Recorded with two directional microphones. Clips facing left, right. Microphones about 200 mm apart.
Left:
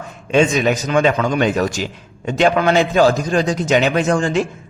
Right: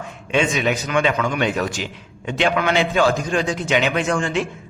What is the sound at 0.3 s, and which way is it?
A man's voice, 40° left (ahead or behind).